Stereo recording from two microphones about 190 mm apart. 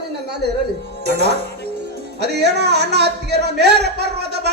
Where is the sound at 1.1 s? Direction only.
60° right (ahead or behind).